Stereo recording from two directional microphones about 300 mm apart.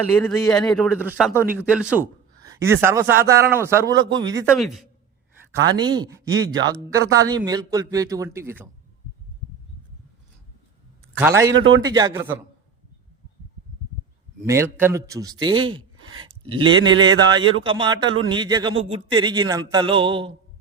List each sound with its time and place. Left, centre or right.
0.2 s a man's voice: centre
4.5 s a man's voice: centre
5.7 s speech: centre
11.2 s speech: centre
11.5 s speech: right
11.9 s speech: centre
14.4 s speech: centre